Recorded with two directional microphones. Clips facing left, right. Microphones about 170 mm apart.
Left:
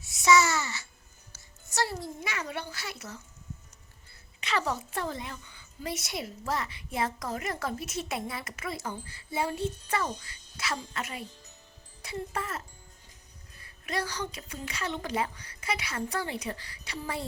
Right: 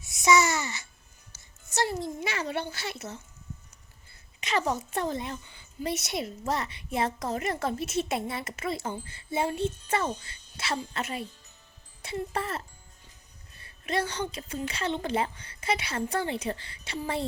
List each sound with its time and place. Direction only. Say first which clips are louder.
0.0 s babbling: even; 15° right (ahead or behind)
1.3 s music: right 4 dB; 20° right (ahead or behind)
4.4 s a woman's voice: right 3 dB; 15° right (ahead or behind)